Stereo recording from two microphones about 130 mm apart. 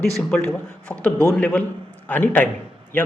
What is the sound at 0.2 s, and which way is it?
A man's voice, 10° left (ahead or behind).